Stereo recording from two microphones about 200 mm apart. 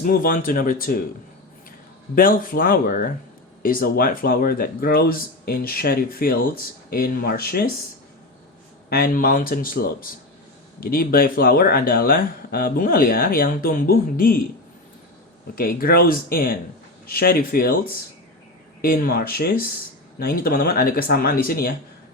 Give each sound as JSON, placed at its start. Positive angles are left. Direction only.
{"t": 0.0, "sound": "speech", "side_deg": 45}
{"t": 2.1, "sound": "speech", "side_deg": 45}
{"t": 8.9, "sound": "speech", "side_deg": 45}
{"t": 15.5, "sound": "speech", "side_deg": 45}